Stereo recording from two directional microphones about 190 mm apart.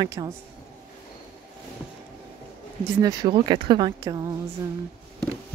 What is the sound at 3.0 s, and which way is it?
Speech, 20° right (ahead or behind).